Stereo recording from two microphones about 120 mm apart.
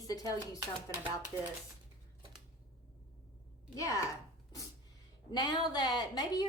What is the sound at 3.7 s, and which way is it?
Speech, 30° left (ahead or behind).